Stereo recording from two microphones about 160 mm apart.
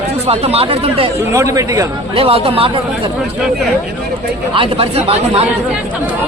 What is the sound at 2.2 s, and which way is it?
Speech, 35° right (ahead or behind).